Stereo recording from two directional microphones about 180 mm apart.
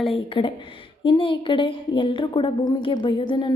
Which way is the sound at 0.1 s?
30° left (ahead or behind).